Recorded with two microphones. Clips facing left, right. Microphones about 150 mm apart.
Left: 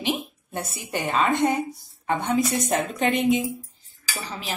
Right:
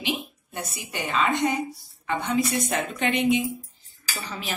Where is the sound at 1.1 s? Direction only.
55° left (ahead or behind).